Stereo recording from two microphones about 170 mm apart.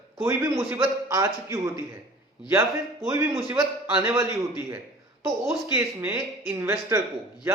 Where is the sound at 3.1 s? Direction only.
15° right (ahead or behind).